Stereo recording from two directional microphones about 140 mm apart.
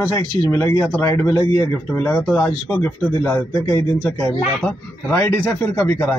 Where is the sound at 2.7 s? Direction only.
20° left (ahead or behind).